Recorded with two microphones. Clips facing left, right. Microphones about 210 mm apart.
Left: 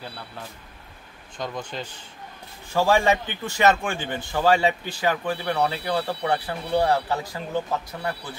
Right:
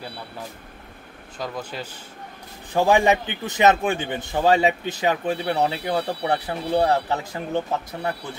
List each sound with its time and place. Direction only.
1.4 s speech: 5° right (ahead or behind)
2.7 s a man's voice: 15° right (ahead or behind)